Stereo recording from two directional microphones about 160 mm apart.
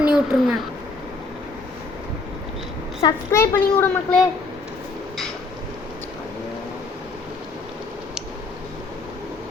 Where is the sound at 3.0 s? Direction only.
15° left (ahead or behind).